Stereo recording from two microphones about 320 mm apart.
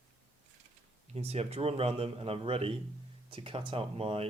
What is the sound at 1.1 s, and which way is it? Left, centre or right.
A man's voice, centre.